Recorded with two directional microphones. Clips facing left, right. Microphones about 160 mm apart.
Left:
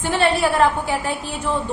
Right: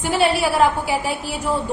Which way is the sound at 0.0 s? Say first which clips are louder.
Even; 5° right (ahead or behind).